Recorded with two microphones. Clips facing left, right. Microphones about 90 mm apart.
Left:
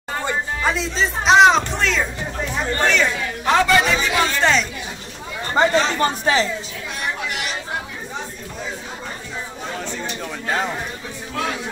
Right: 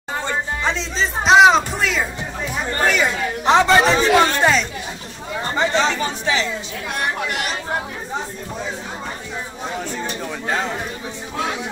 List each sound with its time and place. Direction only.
0.2 s speech: 10° left (ahead or behind); by 3.1 s 10° right (ahead or behind)
3.4 s a man's voice: 25° right (ahead or behind)
4.4 s speech: 5° right (ahead or behind)
5.6 s speech: 45° left (ahead or behind)